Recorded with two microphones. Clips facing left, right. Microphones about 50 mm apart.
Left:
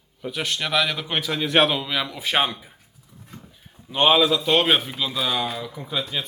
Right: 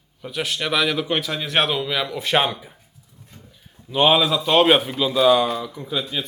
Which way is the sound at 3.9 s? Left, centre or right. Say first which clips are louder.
Right 1 dB; centre.